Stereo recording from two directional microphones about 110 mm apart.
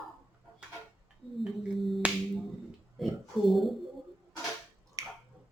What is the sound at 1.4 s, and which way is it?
Sine wave, centre (ahead or behind).